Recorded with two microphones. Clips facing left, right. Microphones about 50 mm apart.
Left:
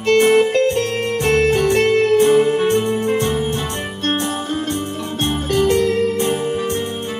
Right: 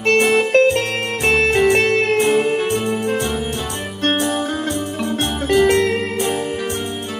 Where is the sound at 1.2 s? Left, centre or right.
Right.